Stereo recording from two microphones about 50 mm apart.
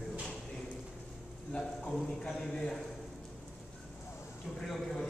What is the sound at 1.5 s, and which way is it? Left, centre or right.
A man's voice, centre.